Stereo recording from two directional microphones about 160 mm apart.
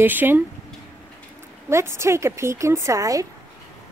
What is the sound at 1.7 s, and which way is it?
A woman's voice, 15° right (ahead or behind).